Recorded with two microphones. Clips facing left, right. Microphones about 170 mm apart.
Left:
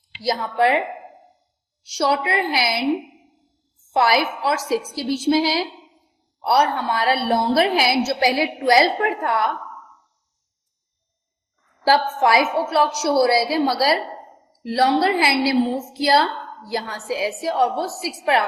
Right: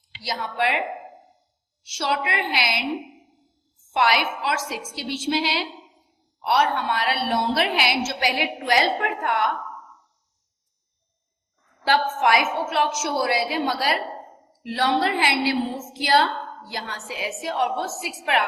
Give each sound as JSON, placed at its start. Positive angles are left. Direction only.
{"t": 0.2, "sound": "a woman's voice", "side_deg": 40}
{"t": 1.8, "sound": "a woman's voice", "side_deg": 40}
{"t": 3.9, "sound": "a woman's voice", "side_deg": 35}
{"t": 11.9, "sound": "a woman's voice", "side_deg": 35}